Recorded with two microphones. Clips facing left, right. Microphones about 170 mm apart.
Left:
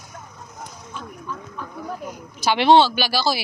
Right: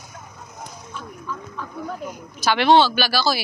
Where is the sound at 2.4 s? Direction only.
25° left (ahead or behind).